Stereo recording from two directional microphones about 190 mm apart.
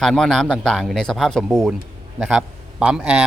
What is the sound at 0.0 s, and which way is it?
A man's voice, centre (ahead or behind).